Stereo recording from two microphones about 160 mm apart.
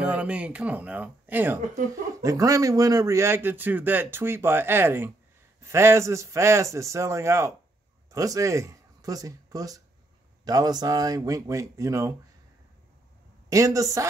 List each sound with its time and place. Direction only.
0.0 s a man's voice: 10° right (ahead or behind)
13.5 s speech: 20° right (ahead or behind)